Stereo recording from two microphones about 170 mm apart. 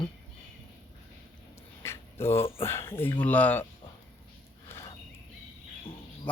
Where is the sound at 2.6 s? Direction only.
15° left (ahead or behind).